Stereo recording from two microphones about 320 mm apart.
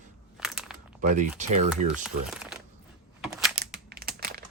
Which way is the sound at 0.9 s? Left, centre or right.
Right.